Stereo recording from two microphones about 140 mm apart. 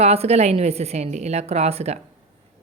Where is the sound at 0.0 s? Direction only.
45° right (ahead or behind).